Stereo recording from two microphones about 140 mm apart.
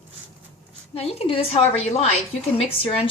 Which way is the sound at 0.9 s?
45° left (ahead or behind).